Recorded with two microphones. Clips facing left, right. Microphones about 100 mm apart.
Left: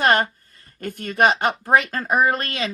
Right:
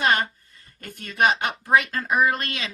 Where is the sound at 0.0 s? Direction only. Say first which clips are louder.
Left 4 dB; 50° left (ahead or behind).